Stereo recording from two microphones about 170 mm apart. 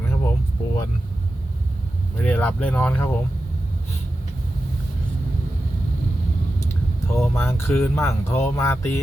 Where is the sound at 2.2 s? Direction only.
10° left (ahead or behind).